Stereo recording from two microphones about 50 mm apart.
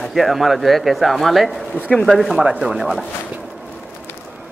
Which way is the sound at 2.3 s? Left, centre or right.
Right.